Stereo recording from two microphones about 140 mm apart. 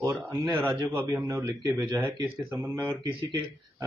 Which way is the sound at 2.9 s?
35° right (ahead or behind).